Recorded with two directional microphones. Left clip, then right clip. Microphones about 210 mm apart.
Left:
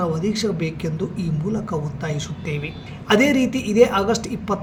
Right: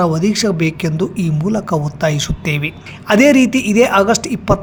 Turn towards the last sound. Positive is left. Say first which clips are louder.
# right 8 dB
turn(degrees=-50)  # may be behind; listen again after turning